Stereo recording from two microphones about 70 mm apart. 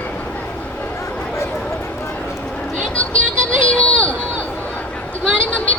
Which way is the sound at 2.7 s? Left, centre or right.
Centre.